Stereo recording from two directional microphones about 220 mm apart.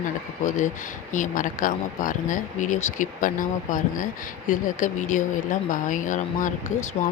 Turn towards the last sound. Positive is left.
turn(degrees=35)  # may be behind; listen again after turning